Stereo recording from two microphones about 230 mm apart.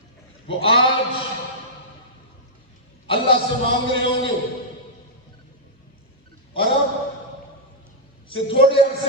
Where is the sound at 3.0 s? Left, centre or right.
Left.